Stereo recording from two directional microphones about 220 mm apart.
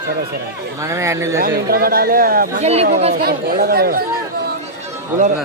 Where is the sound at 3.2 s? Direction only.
45° right (ahead or behind).